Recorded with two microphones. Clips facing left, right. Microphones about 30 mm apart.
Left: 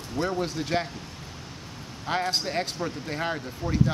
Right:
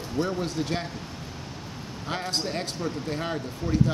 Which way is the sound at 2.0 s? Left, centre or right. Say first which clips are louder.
Left 3 dB; centre.